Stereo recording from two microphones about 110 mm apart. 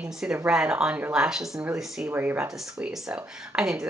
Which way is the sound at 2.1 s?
20° right (ahead or behind).